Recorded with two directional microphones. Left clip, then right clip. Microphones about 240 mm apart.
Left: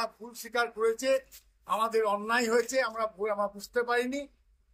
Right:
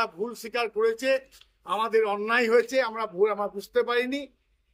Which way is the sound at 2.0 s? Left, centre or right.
Right.